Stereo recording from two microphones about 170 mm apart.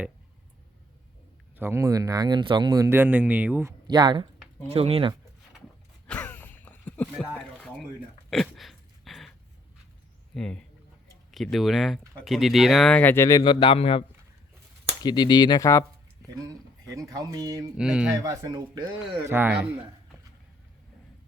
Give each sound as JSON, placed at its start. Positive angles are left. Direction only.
{"t": 1.5, "sound": "speech", "side_deg": -15}
{"t": 6.1, "sound": "a sound", "side_deg": 10}
{"t": 8.3, "sound": "a sound", "side_deg": 0}
{"t": 10.3, "sound": "speech", "side_deg": 5}
{"t": 13.2, "sound": "a man's voice", "side_deg": 25}
{"t": 15.0, "sound": "a man's voice", "side_deg": 25}
{"t": 16.3, "sound": "speech", "side_deg": -20}
{"t": 17.7, "sound": "speech", "side_deg": -5}
{"t": 18.2, "sound": "speech", "side_deg": -20}
{"t": 19.2, "sound": "speech", "side_deg": -10}